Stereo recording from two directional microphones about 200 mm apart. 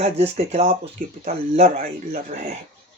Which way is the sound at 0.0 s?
30° right (ahead or behind).